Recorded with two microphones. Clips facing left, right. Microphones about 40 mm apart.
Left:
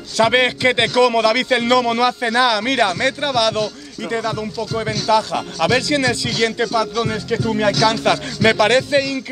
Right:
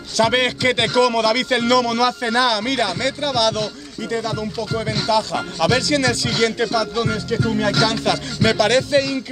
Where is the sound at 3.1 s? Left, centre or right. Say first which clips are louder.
Left 2 dB; left.